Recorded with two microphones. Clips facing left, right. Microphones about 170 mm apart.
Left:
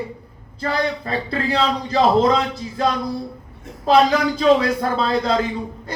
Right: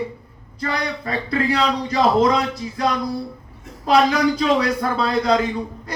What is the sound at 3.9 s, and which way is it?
Speech, 30° left (ahead or behind).